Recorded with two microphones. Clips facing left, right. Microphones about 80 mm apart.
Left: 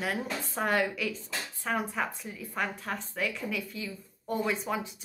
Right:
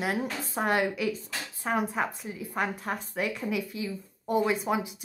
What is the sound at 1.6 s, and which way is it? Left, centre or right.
A woman's voice, right.